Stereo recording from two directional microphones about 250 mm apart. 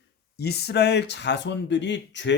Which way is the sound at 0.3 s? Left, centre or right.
Left.